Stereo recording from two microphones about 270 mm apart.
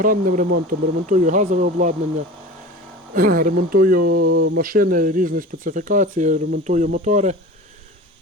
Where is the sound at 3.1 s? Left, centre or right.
Right.